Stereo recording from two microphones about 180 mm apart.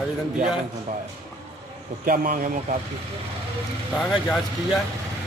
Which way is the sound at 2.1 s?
50° right (ahead or behind).